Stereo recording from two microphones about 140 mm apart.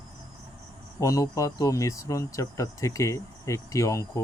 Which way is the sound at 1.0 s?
25° left (ahead or behind).